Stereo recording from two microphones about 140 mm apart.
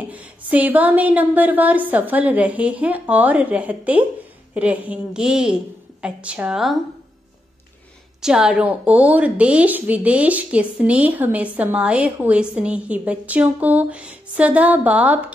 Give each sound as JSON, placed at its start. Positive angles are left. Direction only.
{"t": 0.1, "sound": "a woman's voice", "side_deg": -10}
{"t": 8.2, "sound": "a woman's voice", "side_deg": -5}